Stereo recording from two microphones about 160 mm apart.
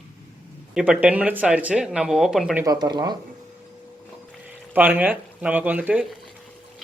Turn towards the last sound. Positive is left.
turn(degrees=-5)  # may be behind; listen again after turning